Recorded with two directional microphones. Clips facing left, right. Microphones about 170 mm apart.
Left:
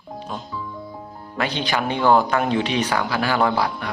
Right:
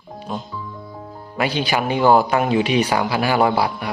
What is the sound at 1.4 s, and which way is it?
A man's voice, 10° right (ahead or behind).